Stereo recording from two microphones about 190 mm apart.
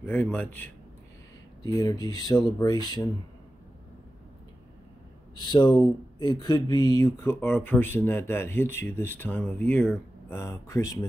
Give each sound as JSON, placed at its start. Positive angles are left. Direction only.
{"t": 0.0, "sound": "speech", "side_deg": 10}
{"t": 1.6, "sound": "speech", "side_deg": 20}
{"t": 5.3, "sound": "speech", "side_deg": 25}